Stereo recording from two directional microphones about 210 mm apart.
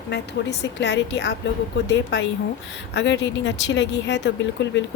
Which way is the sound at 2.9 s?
60° left (ahead or behind).